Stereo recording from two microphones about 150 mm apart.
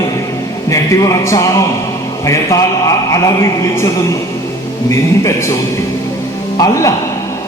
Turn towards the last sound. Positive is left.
turn(degrees=25)  # may be behind; listen again after turning